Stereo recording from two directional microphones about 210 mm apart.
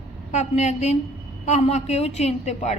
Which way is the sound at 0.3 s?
35° left (ahead or behind).